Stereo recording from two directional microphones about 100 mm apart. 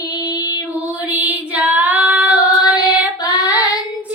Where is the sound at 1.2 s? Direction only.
15° right (ahead or behind).